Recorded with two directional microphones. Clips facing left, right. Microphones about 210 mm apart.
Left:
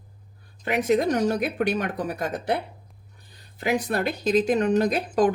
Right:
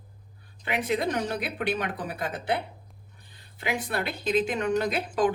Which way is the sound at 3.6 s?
40° left (ahead or behind).